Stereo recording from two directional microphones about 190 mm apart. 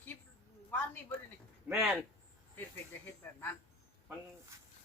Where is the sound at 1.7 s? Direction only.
5° right (ahead or behind).